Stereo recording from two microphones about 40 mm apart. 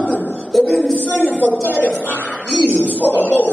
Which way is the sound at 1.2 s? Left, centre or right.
Left.